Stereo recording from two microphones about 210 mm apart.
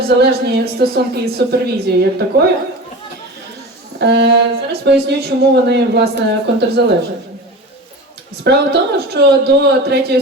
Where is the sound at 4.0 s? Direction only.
55° right (ahead or behind).